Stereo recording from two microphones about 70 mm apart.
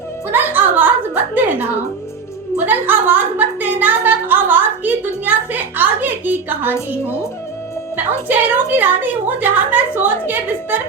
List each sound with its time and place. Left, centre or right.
0.3 s a woman's voice: right
7.9 s a woman's voice: right